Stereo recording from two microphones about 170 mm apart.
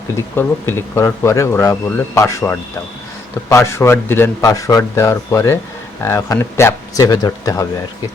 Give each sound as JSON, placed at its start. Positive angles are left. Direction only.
{"t": 0.2, "sound": "speech", "side_deg": 15}